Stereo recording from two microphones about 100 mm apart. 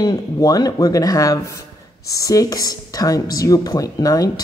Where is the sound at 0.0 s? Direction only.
40° left (ahead or behind).